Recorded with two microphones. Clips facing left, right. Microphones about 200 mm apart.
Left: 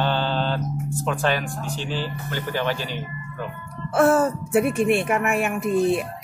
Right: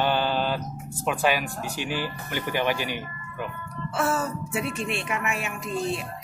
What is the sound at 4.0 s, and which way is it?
Speech, 55° left (ahead or behind).